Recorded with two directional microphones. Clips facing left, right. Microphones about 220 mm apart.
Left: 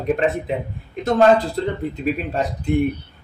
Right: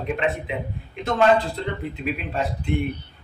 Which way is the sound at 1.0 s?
40° left (ahead or behind).